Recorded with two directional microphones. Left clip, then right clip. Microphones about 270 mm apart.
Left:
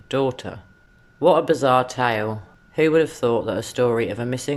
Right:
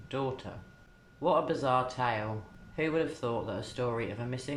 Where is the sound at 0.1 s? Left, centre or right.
Left.